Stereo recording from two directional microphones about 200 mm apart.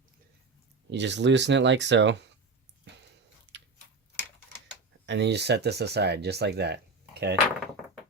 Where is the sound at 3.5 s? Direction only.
60° right (ahead or behind).